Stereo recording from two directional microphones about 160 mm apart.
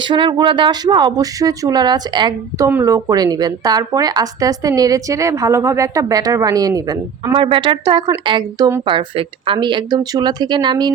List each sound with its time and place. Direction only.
0.0 s a woman's voice: 30° right (ahead or behind)